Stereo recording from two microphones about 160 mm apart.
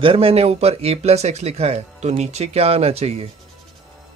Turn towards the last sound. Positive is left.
turn(degrees=-40)  # may be behind; listen again after turning